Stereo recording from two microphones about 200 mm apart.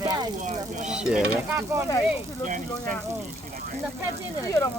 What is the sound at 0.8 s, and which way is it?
Speech, 5° right (ahead or behind).